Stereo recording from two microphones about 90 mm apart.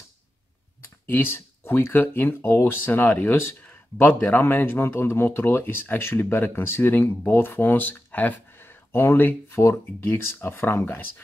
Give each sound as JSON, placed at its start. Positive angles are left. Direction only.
{"t": 1.0, "sound": "speech", "side_deg": 25}